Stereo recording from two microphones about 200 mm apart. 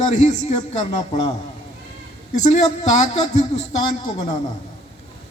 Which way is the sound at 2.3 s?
35° left (ahead or behind).